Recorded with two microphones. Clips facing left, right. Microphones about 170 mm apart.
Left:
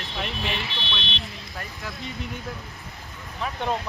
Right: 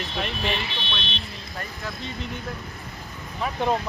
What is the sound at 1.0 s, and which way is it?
Speech, 70° left (ahead or behind).